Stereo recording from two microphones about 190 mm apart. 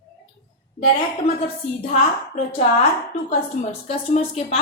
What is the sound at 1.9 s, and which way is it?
A woman's voice, 35° left (ahead or behind).